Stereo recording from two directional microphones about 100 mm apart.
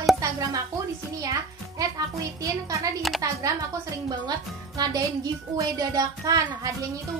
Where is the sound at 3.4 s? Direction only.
35° right (ahead or behind).